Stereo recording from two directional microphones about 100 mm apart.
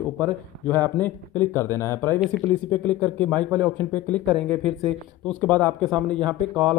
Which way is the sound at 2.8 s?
10° left (ahead or behind).